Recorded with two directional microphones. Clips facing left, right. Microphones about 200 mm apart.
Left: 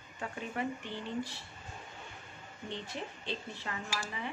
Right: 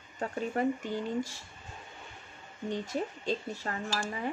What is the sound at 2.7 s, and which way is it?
Speech, 45° right (ahead or behind).